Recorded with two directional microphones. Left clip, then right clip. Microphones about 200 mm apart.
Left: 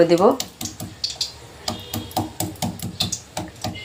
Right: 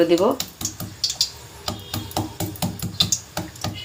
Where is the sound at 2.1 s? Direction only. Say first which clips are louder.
Left 2 dB; 5° right (ahead or behind).